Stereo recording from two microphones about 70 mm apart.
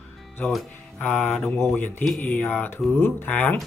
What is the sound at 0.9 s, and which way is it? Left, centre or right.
Speech, centre.